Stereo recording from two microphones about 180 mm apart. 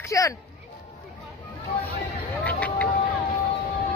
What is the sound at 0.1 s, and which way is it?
Music, 20° left (ahead or behind).